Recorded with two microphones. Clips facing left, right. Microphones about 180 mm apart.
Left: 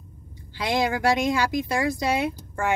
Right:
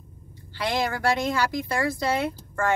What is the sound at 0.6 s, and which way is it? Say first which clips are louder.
A woman's voice: left 2 dB; 15° left (ahead or behind).